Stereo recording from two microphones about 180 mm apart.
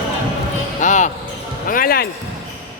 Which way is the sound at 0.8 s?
45° left (ahead or behind).